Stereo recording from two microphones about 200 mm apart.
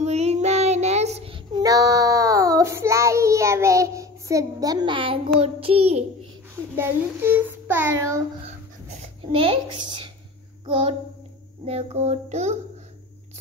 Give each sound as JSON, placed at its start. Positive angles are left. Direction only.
{"t": 0.0, "sound": "child singing", "side_deg": -30}
{"t": 6.7, "sound": "a child's voice", "side_deg": -10}
{"t": 8.5, "sound": "a sound", "side_deg": -35}
{"t": 10.7, "sound": "child singing", "side_deg": -25}